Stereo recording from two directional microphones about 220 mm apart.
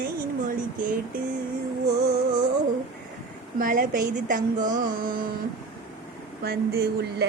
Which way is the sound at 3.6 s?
40° right (ahead or behind).